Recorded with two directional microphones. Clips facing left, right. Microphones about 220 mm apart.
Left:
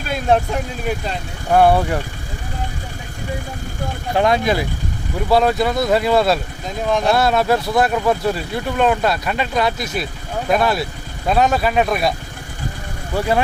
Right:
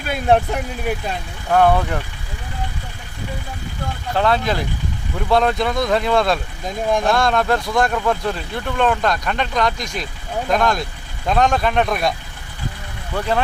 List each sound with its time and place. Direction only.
0.5 s speech: 5° right (ahead or behind)
1.5 s speech: 10° left (ahead or behind)
4.1 s speech: 15° left (ahead or behind)
13.1 s speech: 10° left (ahead or behind)